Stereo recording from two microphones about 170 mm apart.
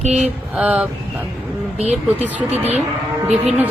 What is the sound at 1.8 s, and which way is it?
Speech, 40° right (ahead or behind).